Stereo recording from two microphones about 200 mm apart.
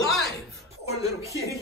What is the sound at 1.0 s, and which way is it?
Speech, 15° right (ahead or behind).